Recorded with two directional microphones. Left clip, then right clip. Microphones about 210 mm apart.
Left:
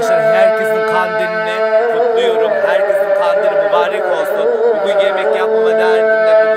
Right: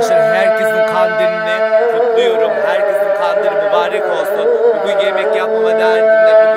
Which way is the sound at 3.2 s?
Centre (ahead or behind).